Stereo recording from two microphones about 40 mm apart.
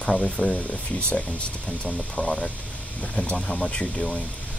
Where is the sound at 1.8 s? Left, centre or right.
Left.